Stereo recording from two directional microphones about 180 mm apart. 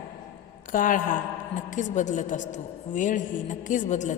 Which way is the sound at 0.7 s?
50° left (ahead or behind).